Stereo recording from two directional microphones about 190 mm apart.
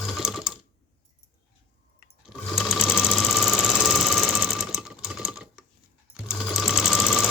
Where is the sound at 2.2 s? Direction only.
Centre (ahead or behind).